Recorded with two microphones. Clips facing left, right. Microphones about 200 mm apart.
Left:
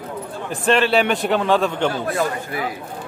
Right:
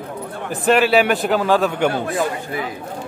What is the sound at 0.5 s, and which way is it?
A man's voice, 5° right (ahead or behind).